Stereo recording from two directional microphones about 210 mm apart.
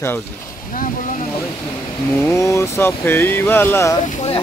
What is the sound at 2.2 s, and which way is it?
Speech, 15° left (ahead or behind).